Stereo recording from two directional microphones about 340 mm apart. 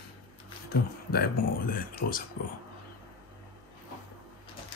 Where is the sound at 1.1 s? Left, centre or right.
Left.